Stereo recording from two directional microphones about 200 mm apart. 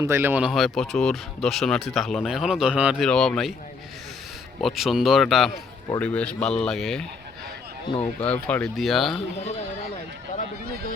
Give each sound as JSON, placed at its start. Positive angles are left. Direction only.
{"t": 0.0, "sound": "speech", "side_deg": -10}
{"t": 4.6, "sound": "a man's voice", "side_deg": 0}
{"t": 8.2, "sound": "speech", "side_deg": 5}
{"t": 9.1, "sound": "speech", "side_deg": 35}